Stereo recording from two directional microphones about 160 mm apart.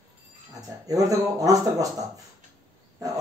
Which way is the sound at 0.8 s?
20° right (ahead or behind).